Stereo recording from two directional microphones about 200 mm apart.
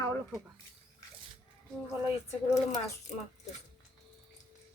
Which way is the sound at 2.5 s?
15° left (ahead or behind).